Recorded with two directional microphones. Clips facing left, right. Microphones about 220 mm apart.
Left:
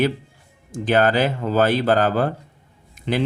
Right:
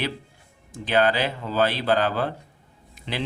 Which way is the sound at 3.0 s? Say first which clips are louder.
Left 8 dB; 50° left (ahead or behind).